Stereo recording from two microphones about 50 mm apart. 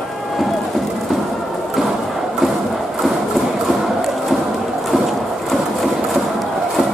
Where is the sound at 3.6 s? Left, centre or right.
Centre.